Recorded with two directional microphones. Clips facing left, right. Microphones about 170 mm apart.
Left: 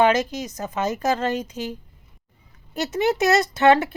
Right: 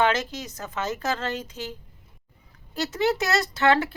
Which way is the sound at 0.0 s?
15° left (ahead or behind).